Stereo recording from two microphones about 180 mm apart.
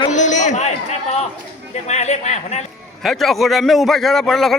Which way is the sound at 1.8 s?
40° left (ahead or behind).